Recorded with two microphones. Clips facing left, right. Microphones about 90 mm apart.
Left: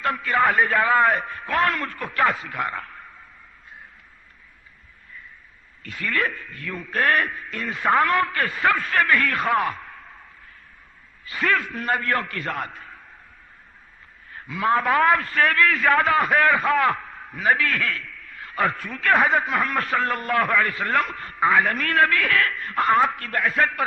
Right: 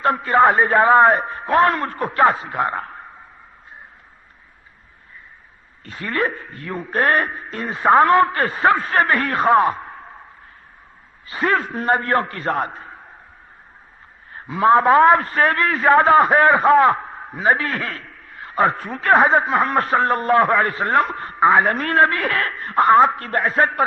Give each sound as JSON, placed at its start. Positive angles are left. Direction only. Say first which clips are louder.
{"t": 0.0, "sound": "a man's voice", "louder": "right 6 dB", "side_deg": -30}
{"t": 5.8, "sound": "a man's voice", "louder": "right 3 dB", "side_deg": -30}
{"t": 11.3, "sound": "a man's voice", "louder": "right 3 dB", "side_deg": -30}
{"t": 14.3, "sound": "a man's voice", "louder": "right 7 dB", "side_deg": -35}